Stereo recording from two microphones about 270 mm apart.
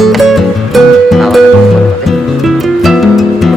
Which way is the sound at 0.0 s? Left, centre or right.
Centre.